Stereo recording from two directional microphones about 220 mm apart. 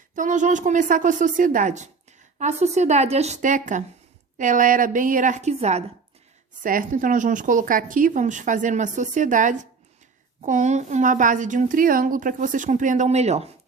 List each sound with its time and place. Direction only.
0.2 s a woman's voice: 35° right (ahead or behind)